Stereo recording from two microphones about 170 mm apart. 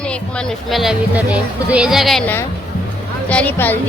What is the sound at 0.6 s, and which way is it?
Speech, centre (ahead or behind).